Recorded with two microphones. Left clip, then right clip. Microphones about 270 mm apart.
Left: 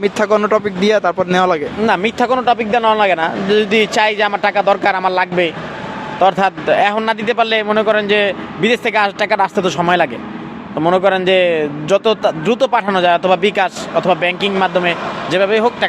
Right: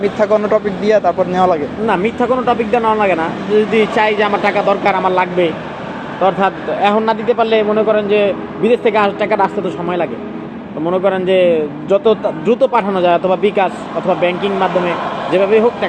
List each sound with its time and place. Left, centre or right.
0.0 s speech: left